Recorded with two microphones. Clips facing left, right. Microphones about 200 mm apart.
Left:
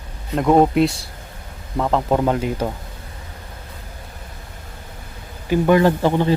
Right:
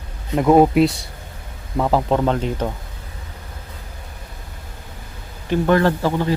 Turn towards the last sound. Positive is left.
turn(degrees=25)  # may be behind; listen again after turning